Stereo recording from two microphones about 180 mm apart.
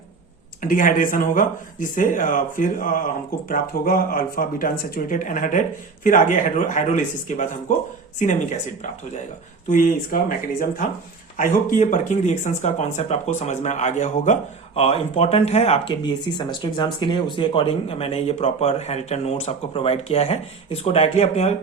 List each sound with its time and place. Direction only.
0.6 s speech: 50° left (ahead or behind)
9.6 s speech: 50° left (ahead or behind)